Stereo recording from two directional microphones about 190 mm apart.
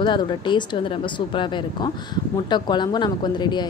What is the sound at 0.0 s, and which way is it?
A woman's voice, 25° left (ahead or behind).